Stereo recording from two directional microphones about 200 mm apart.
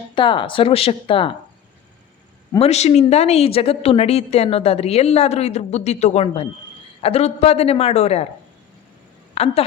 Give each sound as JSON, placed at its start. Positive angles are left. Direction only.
{"t": 0.1, "sound": "speech", "side_deg": 25}
{"t": 2.6, "sound": "a woman's voice", "side_deg": 35}
{"t": 9.3, "sound": "a woman's voice", "side_deg": 30}